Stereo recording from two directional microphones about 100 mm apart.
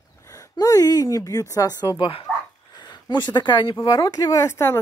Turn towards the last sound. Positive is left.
turn(degrees=25)  # may be behind; listen again after turning